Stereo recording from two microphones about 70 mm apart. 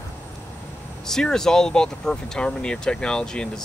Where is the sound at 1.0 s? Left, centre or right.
Centre.